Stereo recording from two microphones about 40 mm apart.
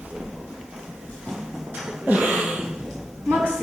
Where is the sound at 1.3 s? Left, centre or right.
Centre.